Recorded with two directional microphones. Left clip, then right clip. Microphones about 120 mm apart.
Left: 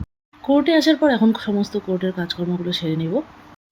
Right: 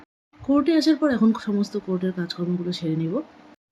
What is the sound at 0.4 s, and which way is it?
Speech, 5° left (ahead or behind).